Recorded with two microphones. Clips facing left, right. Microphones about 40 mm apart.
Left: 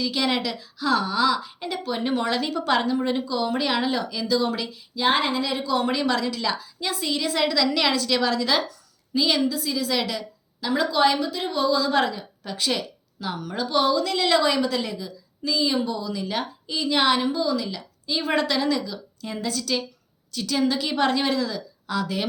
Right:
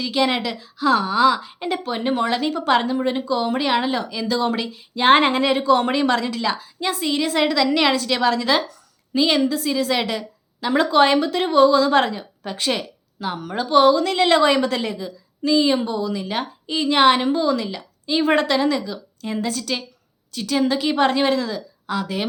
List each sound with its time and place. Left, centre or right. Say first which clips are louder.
0.0 s speech: right 4 dB; right
9.4 s speech: right 4 dB; right
9.6 s a woman's voice: right 4 dB; right
10.9 s speech: right 6 dB; right
14.8 s speech: right 3 dB; right